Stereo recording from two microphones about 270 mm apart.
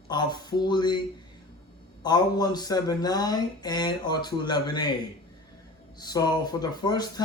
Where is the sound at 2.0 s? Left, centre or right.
Centre.